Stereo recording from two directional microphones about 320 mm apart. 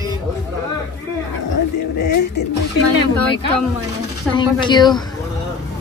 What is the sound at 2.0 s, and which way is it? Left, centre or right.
Speech, left.